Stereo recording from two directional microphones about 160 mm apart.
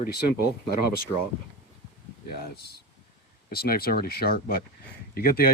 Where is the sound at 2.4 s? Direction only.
80° left.